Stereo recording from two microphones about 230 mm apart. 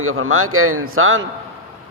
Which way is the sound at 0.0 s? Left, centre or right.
Right.